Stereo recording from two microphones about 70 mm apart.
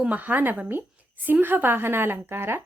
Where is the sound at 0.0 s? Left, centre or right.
Right.